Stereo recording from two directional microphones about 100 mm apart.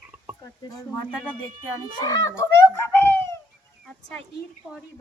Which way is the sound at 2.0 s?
35° left (ahead or behind).